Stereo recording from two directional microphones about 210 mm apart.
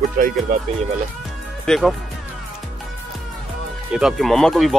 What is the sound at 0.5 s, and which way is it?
Speech, 40° right (ahead or behind).